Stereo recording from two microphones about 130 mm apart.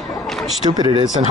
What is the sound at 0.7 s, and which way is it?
Speech, 35° right (ahead or behind).